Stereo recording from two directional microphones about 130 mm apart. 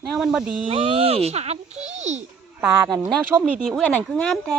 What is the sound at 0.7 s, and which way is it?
Speech, 50° right (ahead or behind).